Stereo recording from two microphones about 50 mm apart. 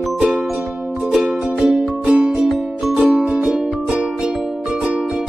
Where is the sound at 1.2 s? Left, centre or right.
Centre.